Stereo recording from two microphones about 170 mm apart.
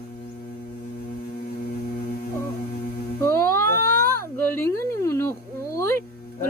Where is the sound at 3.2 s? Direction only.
15° left (ahead or behind).